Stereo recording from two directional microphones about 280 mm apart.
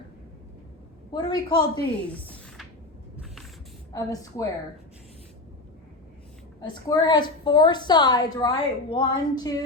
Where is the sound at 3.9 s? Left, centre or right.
Centre.